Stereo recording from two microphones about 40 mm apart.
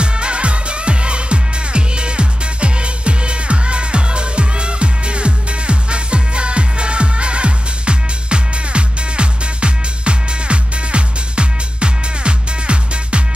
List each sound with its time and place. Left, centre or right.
0.0 s music: right